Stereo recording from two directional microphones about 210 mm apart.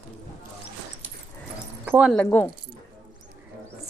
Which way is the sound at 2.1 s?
10° left (ahead or behind).